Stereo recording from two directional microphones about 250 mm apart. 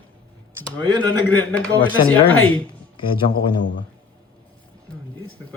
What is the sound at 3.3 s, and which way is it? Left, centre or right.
Speech, left.